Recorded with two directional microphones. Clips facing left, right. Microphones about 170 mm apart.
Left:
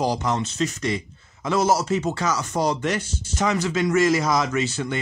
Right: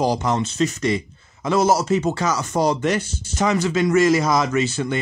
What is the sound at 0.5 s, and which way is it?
Speech, 15° right (ahead or behind).